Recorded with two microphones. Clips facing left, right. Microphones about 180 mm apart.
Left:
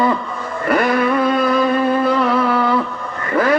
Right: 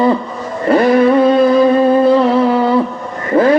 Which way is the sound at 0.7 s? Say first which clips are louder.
Right 7 dB; 25° right (ahead or behind).